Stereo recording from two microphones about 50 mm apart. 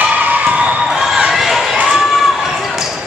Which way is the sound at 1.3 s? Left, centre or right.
Centre.